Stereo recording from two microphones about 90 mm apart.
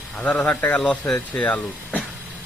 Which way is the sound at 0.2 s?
15° left (ahead or behind).